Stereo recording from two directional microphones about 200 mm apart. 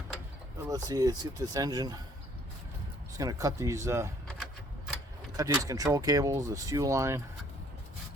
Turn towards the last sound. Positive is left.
turn(degrees=-15)  # may be behind; listen again after turning